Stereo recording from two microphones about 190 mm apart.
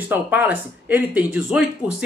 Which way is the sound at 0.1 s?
10° right (ahead or behind).